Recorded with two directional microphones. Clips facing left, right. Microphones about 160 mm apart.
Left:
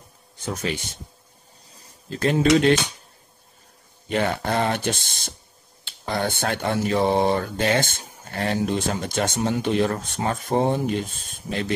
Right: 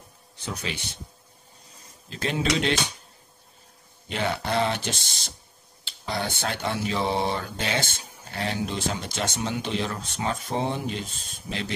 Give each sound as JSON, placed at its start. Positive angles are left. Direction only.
{"t": 0.5, "sound": "speech", "side_deg": 45}
{"t": 1.7, "sound": "a sound", "side_deg": 35}
{"t": 2.1, "sound": "speech", "side_deg": 45}
{"t": 4.1, "sound": "speech", "side_deg": 50}